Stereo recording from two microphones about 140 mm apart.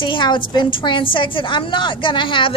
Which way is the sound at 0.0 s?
35° left (ahead or behind).